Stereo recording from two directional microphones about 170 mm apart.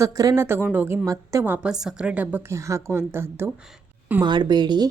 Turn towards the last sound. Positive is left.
turn(degrees=-25)  # may be behind; listen again after turning